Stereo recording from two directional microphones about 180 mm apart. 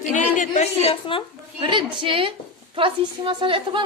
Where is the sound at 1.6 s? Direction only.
25° right (ahead or behind).